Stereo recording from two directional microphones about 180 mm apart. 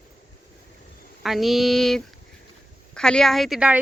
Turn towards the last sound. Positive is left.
turn(degrees=-5)  # may be behind; listen again after turning